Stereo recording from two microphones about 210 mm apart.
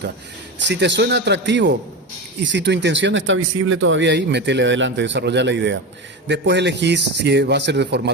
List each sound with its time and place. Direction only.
0.7 s speech: 55° right (ahead or behind)